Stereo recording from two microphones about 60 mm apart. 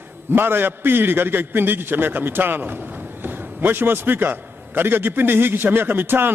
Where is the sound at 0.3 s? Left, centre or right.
Right.